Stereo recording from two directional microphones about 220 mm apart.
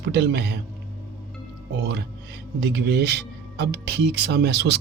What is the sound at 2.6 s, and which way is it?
Speech, 50° right (ahead or behind).